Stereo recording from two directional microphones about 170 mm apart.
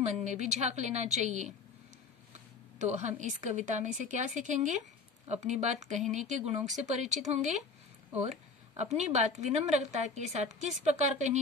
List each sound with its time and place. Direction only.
0.0 s a woman's voice: 45° right (ahead or behind)
2.8 s a woman's voice: 45° right (ahead or behind)
8.2 s a sound: 40° right (ahead or behind)
8.9 s a woman's voice: 40° right (ahead or behind)